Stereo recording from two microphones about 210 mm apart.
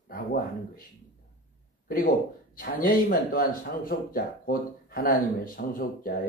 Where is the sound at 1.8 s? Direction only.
45° left (ahead or behind).